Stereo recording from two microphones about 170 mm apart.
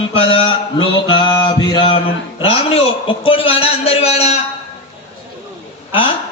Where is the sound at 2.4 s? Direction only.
35° left (ahead or behind).